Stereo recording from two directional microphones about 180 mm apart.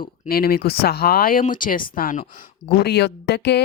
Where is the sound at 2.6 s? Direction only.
65° left (ahead or behind).